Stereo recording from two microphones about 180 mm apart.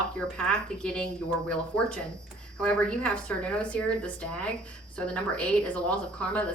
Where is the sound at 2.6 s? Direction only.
5° left (ahead or behind).